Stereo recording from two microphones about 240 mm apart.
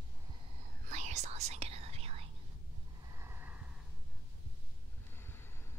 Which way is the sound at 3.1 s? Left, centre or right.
Centre.